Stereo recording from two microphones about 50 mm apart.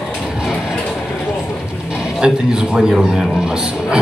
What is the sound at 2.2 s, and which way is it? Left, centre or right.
A man's voice, centre.